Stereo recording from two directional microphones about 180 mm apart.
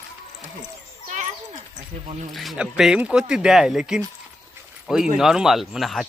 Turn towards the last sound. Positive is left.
turn(degrees=0)  # may be behind; listen again after turning